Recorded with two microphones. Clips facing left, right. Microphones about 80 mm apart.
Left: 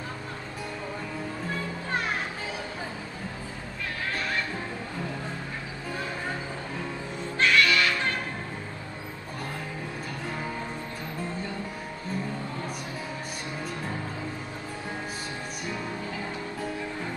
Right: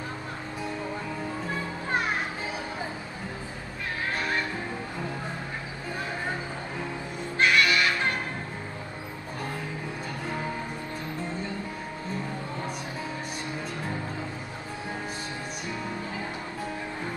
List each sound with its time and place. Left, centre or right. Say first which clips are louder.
7.3 s music: even; centre